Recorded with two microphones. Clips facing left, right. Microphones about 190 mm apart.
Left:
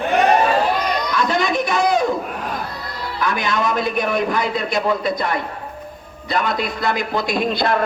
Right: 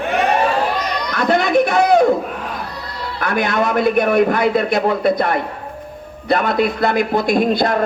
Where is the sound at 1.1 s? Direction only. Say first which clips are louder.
Right 7 dB; 60° right (ahead or behind).